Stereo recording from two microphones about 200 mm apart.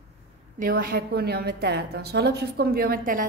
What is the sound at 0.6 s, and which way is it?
A woman's voice, 50° right (ahead or behind).